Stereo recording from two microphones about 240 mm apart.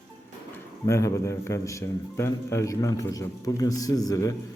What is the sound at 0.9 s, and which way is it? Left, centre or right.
A man's voice, centre.